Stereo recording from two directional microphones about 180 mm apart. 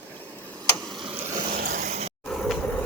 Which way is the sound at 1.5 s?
55° right (ahead or behind).